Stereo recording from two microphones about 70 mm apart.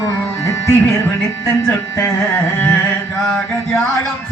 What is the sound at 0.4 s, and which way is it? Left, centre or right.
Music, left.